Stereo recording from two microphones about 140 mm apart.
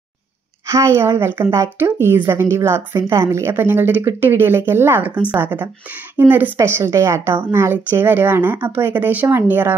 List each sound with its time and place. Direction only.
0.7 s a woman's voice: 20° right (ahead or behind)